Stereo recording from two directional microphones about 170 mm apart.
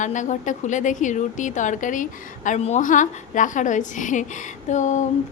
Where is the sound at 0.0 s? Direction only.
45° left (ahead or behind).